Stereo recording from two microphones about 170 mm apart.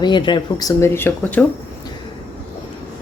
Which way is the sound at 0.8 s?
10° left (ahead or behind).